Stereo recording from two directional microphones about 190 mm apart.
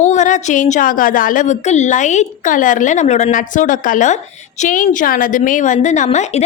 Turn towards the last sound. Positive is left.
turn(degrees=35)  # may be behind; listen again after turning